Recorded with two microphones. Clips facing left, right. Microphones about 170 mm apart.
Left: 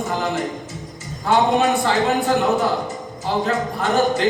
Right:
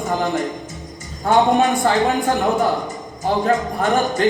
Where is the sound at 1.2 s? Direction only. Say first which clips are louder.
Right 2 dB; 50° right (ahead or behind).